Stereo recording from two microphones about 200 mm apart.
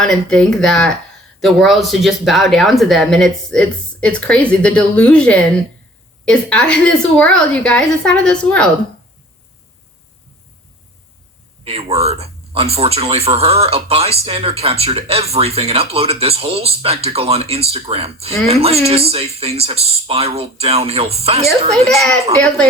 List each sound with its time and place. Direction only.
0.0 s speech: 5° left (ahead or behind)
11.6 s speech: 30° right (ahead or behind)
21.7 s speech: centre (ahead or behind)